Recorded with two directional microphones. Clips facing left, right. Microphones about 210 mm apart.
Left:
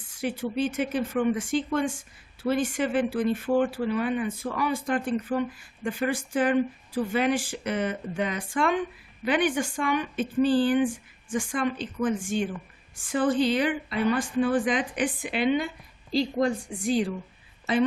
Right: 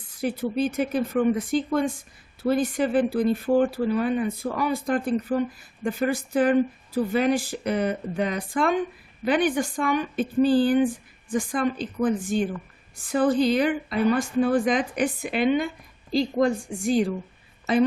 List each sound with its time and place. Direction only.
0.2 s a woman's voice: 40° right (ahead or behind)